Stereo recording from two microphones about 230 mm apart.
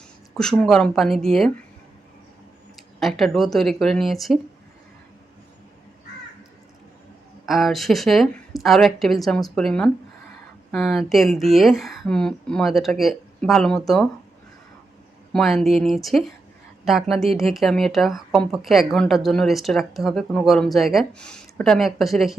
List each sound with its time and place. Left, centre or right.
0.3 s speech: centre
3.0 s speech: centre
7.4 s speech: centre
15.3 s speech: centre